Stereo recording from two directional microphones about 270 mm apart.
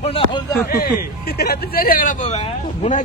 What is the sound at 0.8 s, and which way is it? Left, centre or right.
Speech, left.